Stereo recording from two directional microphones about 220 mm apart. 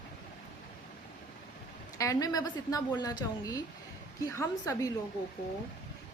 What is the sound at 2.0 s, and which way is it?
A woman's voice, 15° left (ahead or behind).